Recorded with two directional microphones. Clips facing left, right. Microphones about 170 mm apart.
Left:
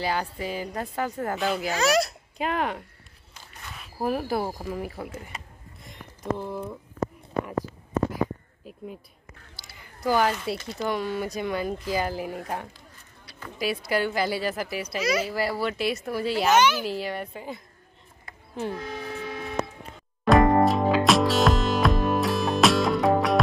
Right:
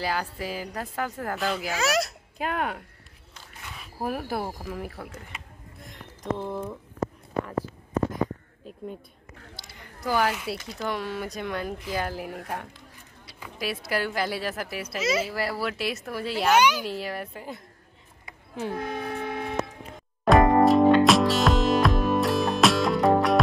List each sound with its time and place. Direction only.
0.0 s speech: centre (ahead or behind)
5.8 s a sound: centre (ahead or behind)
8.6 s speech: 5° left (ahead or behind)
16.5 s a child's voice: 15° right (ahead or behind)
16.8 s speech: centre (ahead or behind)
18.7 s a sound: 55° right (ahead or behind)
20.2 s music: centre (ahead or behind)